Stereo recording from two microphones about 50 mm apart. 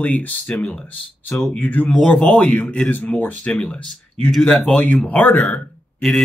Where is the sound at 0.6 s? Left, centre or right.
Left.